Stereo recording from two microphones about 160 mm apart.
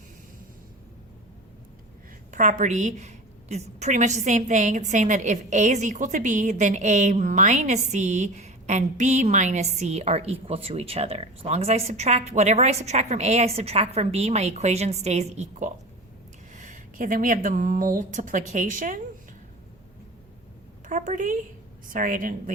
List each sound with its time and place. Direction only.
2.3 s a woman's voice: 50° right (ahead or behind)
16.6 s a woman's voice: 55° right (ahead or behind)
20.8 s a woman's voice: 55° right (ahead or behind)